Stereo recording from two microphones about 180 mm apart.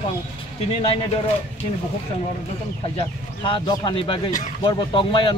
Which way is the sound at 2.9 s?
25° left (ahead or behind).